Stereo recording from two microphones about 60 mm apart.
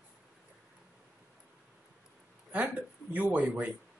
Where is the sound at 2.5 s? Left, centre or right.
Right.